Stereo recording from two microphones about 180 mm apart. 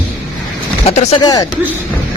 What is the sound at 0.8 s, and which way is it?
Speech, 35° left (ahead or behind).